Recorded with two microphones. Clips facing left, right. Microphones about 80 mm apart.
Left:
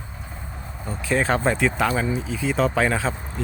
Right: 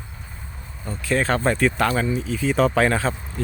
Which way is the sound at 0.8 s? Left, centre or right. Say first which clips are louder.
Even; centre.